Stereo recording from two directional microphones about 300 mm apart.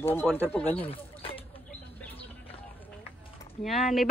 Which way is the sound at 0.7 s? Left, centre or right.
Centre.